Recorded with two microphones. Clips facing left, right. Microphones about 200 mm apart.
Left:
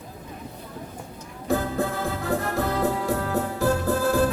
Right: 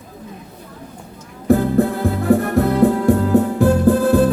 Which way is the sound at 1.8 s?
60° right (ahead or behind).